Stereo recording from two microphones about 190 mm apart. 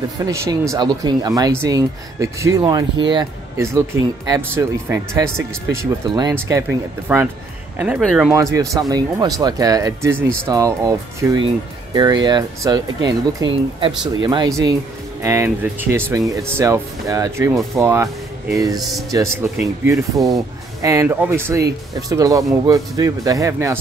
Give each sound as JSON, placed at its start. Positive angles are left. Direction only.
{"t": 0.2, "sound": "speech", "side_deg": -15}
{"t": 7.1, "sound": "speech", "side_deg": -5}
{"t": 8.3, "sound": "speech", "side_deg": -15}
{"t": 18.8, "sound": "speech", "side_deg": 0}
{"t": 19.1, "sound": "speech", "side_deg": -15}